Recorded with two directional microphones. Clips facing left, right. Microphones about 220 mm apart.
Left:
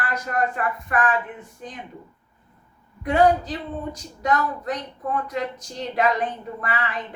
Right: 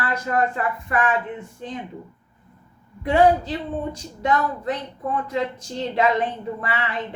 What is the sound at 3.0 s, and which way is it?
Speech, 25° right (ahead or behind).